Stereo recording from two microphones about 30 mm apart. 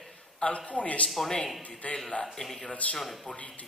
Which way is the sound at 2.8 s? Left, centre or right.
Left.